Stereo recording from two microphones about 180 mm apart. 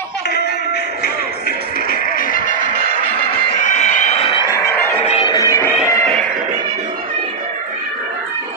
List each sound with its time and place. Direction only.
1.9 s music: 50° left (ahead or behind)
3.6 s a sound: 45° left (ahead or behind)
4.5 s music: 10° left (ahead or behind)
5.0 s music: 30° left (ahead or behind)